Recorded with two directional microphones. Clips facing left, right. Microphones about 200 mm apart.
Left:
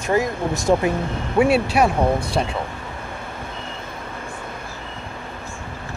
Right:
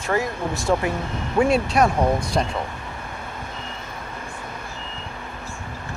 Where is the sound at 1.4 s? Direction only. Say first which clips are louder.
Left 2 dB; 5° left (ahead or behind).